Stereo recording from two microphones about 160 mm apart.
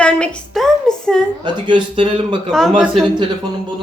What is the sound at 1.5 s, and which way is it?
Speech, 30° right (ahead or behind).